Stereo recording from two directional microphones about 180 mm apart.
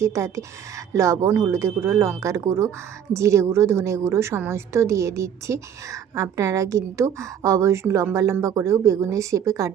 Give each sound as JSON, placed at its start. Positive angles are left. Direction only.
{"t": 0.0, "sound": "speech", "side_deg": -15}